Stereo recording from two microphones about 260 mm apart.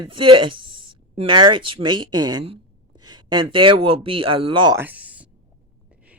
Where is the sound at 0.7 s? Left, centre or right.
Right.